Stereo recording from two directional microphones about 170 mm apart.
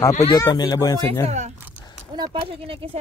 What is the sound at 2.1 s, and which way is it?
Speech, 30° right (ahead or behind).